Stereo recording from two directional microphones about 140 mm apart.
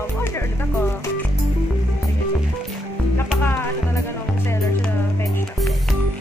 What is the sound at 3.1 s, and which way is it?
Music, 15° left (ahead or behind).